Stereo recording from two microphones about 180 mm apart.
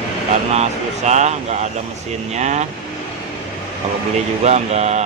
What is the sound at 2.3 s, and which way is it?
Speech, 40° right (ahead or behind).